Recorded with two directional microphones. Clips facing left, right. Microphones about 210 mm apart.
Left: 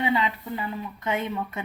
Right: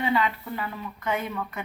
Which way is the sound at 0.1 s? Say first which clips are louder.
Even; 20° left (ahead or behind).